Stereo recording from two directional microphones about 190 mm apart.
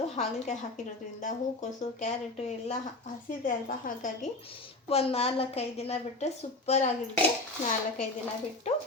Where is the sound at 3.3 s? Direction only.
45° left (ahead or behind).